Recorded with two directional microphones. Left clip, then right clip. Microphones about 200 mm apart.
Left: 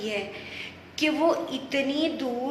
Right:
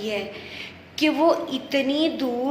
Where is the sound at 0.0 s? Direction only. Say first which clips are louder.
Right 3 dB; 15° right (ahead or behind).